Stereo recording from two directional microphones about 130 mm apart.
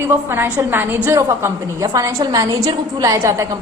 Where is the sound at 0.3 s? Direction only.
15° right (ahead or behind).